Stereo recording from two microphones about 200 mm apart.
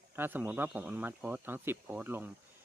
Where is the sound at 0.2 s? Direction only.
10° right (ahead or behind).